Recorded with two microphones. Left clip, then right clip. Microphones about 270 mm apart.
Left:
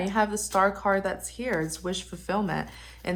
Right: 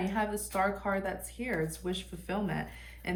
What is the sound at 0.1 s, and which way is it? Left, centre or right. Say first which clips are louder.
A woman's voice: left 8 dB; centre.